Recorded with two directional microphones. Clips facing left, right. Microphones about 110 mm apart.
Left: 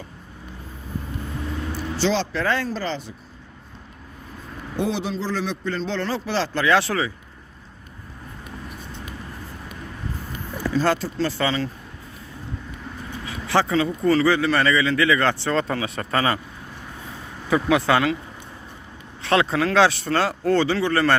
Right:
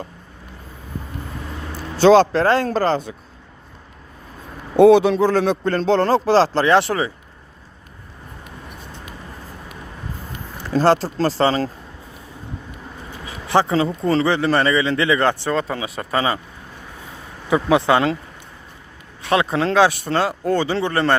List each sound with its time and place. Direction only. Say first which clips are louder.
2.0 s speech: right 11 dB; 50° right (ahead or behind)
4.8 s speech: right 14 dB; 60° right (ahead or behind); by 7.1 s 25° right (ahead or behind)
10.7 s speech: right 5 dB; 45° right (ahead or behind)
10.9 s speech: right 5 dB; 35° right (ahead or behind)
13.2 s a sound: right 3 dB; 20° right (ahead or behind)
13.7 s speech: right 1 dB; 25° right (ahead or behind)
17.5 s speech: right 3 dB; 20° right (ahead or behind)
19.2 s speech: right 1 dB; 15° right (ahead or behind)